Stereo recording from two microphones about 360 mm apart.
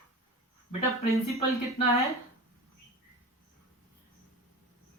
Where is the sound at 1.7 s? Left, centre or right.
Centre.